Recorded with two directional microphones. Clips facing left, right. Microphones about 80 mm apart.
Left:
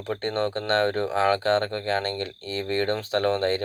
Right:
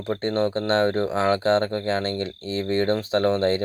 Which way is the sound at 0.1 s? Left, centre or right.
Right.